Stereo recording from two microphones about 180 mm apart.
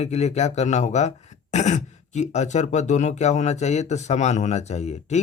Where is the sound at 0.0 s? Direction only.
40° left (ahead or behind).